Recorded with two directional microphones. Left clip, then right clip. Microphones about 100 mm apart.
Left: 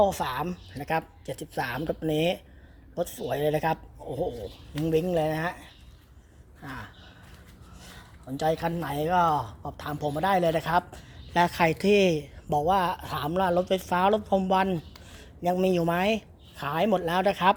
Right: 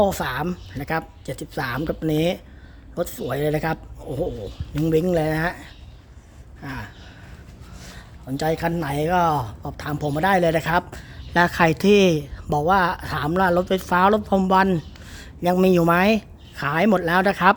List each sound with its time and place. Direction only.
0.0 s a woman's voice: 15° right (ahead or behind)
8.4 s a woman's voice: 15° right (ahead or behind)
14.7 s a sound: 30° right (ahead or behind)
15.6 s a woman's voice: 30° right (ahead or behind)